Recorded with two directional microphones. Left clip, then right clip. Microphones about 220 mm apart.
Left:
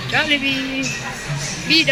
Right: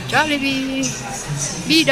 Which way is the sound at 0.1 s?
10° right (ahead or behind).